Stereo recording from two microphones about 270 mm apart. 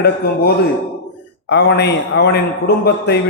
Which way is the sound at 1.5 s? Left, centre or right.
Left.